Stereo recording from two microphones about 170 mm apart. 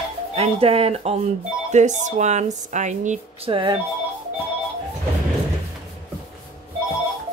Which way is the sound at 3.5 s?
30° right (ahead or behind).